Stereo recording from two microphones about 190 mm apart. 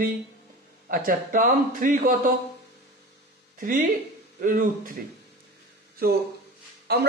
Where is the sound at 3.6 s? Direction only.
45° right (ahead or behind).